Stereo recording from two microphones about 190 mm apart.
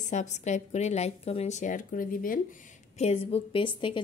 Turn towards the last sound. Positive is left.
turn(degrees=25)  # may be behind; listen again after turning